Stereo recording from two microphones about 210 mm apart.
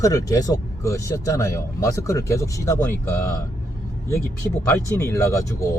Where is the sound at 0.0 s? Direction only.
15° left (ahead or behind).